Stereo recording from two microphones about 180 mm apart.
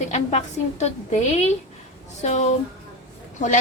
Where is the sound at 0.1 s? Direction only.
35° left (ahead or behind).